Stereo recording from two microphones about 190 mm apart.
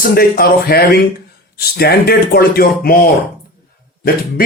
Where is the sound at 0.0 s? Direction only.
50° left (ahead or behind).